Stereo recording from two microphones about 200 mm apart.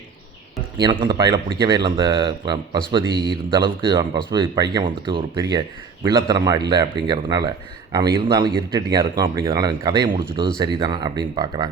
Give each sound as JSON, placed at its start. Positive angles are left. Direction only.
{"t": 0.9, "sound": "a man's voice", "side_deg": -20}
{"t": 10.0, "sound": "speech", "side_deg": -45}
{"t": 10.6, "sound": "a man's voice", "side_deg": -20}